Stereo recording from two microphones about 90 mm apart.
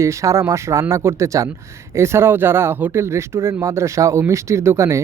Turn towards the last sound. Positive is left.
turn(degrees=-30)  # may be behind; listen again after turning